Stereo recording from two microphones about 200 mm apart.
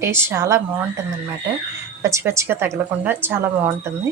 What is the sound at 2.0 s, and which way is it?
Speech, 15° right (ahead or behind).